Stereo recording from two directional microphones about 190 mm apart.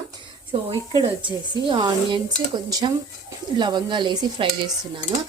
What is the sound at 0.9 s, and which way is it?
A woman's voice, 25° right (ahead or behind).